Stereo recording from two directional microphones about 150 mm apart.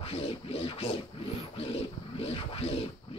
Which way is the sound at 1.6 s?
40° left (ahead or behind).